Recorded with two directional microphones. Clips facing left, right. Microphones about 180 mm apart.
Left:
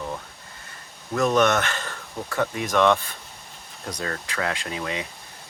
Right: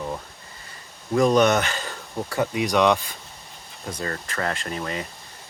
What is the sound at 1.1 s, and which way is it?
Speech, 15° right (ahead or behind).